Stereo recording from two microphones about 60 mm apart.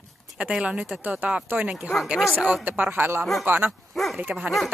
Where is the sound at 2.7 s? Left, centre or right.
Right.